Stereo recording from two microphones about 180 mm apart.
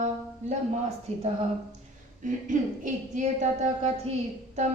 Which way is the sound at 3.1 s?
40° right (ahead or behind).